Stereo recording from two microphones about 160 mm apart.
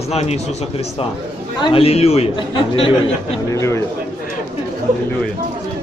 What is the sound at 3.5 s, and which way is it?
Speech, 20° left (ahead or behind).